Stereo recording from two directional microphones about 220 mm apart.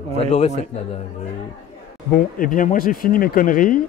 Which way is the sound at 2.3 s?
40° left (ahead or behind).